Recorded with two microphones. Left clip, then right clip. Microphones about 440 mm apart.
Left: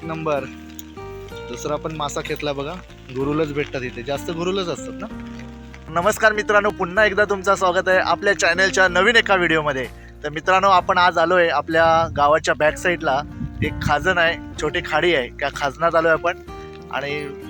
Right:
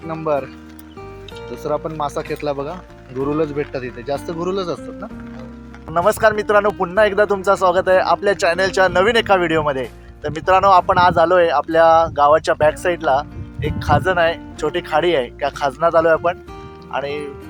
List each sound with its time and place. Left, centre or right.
0.1 s speech: left
1.6 s speech: left
5.9 s speech: left